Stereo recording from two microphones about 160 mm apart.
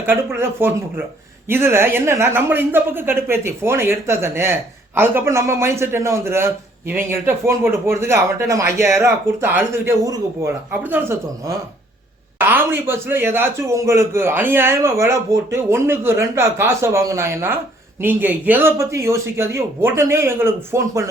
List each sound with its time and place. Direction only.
0.0 s a man's voice: 15° right (ahead or behind)